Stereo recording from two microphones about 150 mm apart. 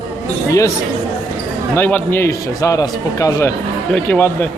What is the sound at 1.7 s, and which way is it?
A man's voice, 15° left (ahead or behind).